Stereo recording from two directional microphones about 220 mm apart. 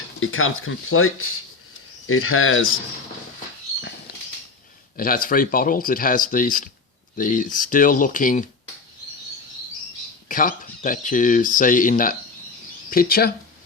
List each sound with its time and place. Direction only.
0.2 s speech: 65° left (ahead or behind)
4.9 s speech: 40° left (ahead or behind)
10.2 s speech: 40° left (ahead or behind)